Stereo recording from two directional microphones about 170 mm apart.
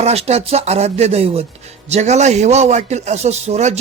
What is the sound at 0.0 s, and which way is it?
Speech, 40° right (ahead or behind).